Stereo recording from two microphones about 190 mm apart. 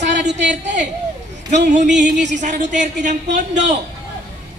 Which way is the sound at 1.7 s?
40° right (ahead or behind).